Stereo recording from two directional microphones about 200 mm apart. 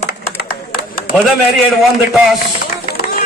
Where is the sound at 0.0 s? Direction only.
50° left (ahead or behind).